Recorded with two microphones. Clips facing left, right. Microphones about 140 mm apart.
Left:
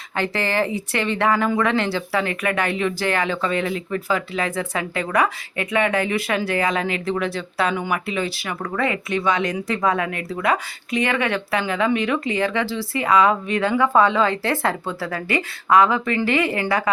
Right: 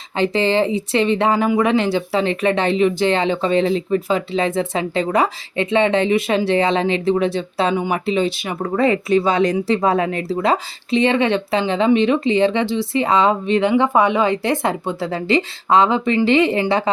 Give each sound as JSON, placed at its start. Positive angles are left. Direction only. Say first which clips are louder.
{"t": 0.2, "sound": "speech", "louder": "right 5 dB", "side_deg": -20}